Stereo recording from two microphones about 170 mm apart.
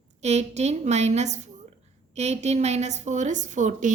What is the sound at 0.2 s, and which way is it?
A woman's voice, 40° right (ahead or behind).